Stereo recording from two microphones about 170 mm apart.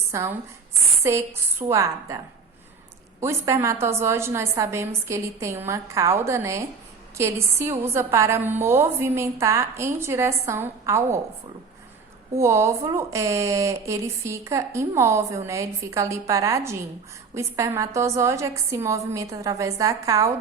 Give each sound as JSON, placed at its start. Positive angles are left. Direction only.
{"t": 0.1, "sound": "a woman's voice", "side_deg": -15}
{"t": 12.3, "sound": "a woman's voice", "side_deg": -15}